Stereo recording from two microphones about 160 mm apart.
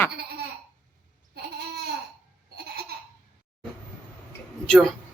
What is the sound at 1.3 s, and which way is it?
Babbling, 80° right.